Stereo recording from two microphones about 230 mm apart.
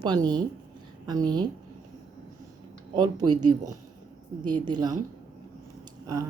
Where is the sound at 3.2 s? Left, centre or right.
Right.